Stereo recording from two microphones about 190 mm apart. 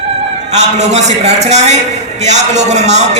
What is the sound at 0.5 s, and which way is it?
A man's voice, 35° right (ahead or behind).